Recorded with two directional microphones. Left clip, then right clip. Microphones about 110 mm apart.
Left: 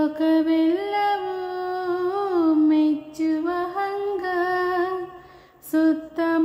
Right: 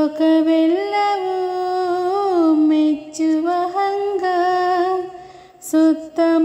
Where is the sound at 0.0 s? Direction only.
20° right (ahead or behind).